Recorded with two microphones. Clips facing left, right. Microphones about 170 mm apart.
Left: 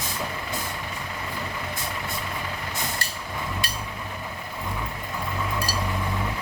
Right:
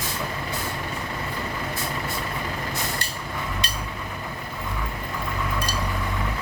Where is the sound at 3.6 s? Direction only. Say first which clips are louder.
Right 1 dB; 20° right (ahead or behind).